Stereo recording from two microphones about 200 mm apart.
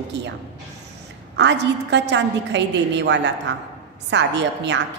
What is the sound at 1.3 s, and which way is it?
A woman's voice, 60° right (ahead or behind).